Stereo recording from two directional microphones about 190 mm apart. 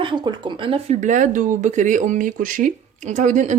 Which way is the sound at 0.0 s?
25° right (ahead or behind).